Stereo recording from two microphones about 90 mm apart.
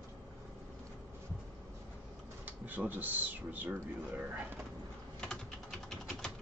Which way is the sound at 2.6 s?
20° right (ahead or behind).